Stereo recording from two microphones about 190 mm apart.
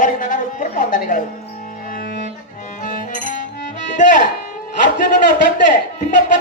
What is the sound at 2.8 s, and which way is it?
Music, 45° left (ahead or behind).